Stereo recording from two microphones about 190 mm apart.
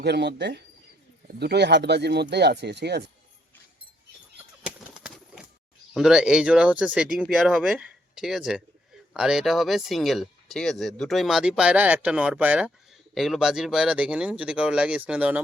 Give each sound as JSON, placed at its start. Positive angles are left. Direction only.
{"t": 0.0, "sound": "speech", "side_deg": -60}
{"t": 4.6, "sound": "bird flight", "side_deg": -5}
{"t": 5.9, "sound": "speech", "side_deg": -5}